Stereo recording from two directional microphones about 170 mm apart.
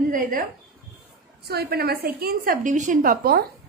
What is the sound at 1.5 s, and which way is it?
A woman's voice, 70° right (ahead or behind).